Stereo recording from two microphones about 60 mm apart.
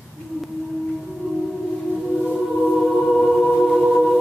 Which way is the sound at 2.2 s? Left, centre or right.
Centre.